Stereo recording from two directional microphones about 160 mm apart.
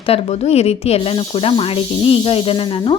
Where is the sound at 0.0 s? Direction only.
35° left (ahead or behind).